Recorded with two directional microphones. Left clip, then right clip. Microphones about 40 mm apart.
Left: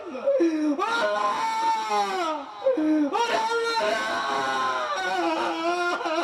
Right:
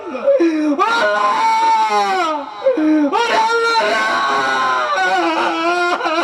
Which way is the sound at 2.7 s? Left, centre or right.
Right.